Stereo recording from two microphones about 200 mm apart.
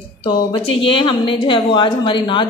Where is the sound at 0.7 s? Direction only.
25° left (ahead or behind).